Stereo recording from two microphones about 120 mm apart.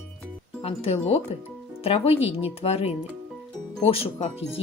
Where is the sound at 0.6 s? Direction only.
55° left (ahead or behind).